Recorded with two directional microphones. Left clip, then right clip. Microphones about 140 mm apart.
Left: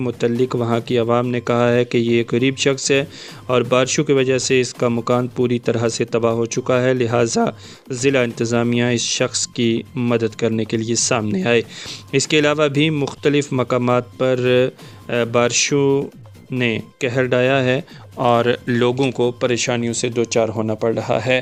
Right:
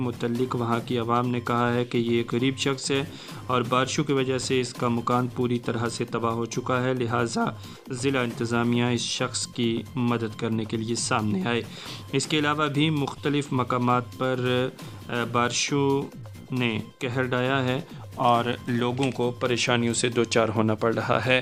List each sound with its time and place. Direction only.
0.2 s speech: 40° left (ahead or behind)
19.5 s speech: 20° left (ahead or behind)